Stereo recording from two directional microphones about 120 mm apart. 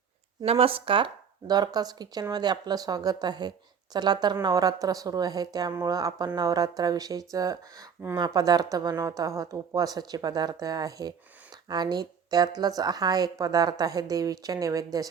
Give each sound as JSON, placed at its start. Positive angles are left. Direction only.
{"t": 0.4, "sound": "a woman's voice", "side_deg": -55}